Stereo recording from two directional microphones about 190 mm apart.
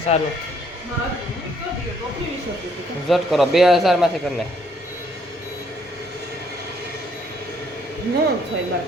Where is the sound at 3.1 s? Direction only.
Centre (ahead or behind).